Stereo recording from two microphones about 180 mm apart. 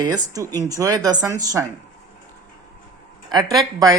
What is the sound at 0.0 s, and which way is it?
Speech, 20° right (ahead or behind).